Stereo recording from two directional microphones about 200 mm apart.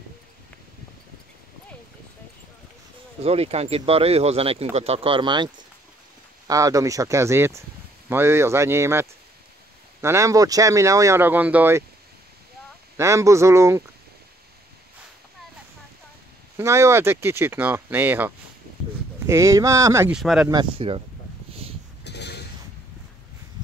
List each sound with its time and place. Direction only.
3.2 s speech: 30° right (ahead or behind); by 9.0 s 15° right (ahead or behind)
10.0 s speech: 15° right (ahead or behind)
12.9 s speech: 15° right (ahead or behind)
16.5 s speech: 15° right (ahead or behind)
20.2 s speech: centre (ahead or behind)
20.4 s speech: 25° right (ahead or behind)
22.0 s mechanisms: 55° left (ahead or behind)